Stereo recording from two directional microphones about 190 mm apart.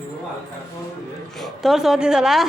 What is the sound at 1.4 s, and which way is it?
A woman's voice, centre (ahead or behind).